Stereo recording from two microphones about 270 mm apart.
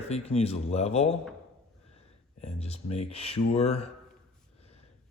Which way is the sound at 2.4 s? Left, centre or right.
Left.